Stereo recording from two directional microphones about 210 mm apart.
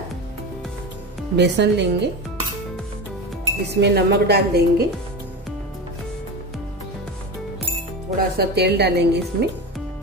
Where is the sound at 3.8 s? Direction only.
50° right (ahead or behind).